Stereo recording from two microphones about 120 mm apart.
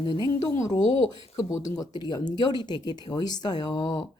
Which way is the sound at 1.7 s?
35° left (ahead or behind).